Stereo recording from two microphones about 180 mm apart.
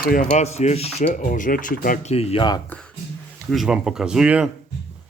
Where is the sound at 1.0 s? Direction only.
50° left (ahead or behind).